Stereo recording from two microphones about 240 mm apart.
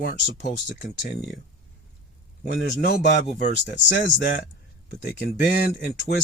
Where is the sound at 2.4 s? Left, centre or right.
Left.